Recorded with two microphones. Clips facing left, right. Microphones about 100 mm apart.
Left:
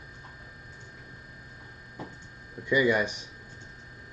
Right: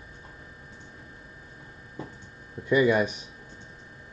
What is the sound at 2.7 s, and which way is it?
Speech, 25° right (ahead or behind).